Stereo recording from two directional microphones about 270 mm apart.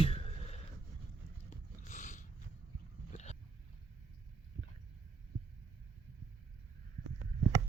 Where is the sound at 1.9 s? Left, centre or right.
Left.